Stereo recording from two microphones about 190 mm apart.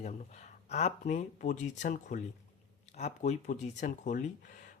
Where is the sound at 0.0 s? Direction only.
35° left (ahead or behind).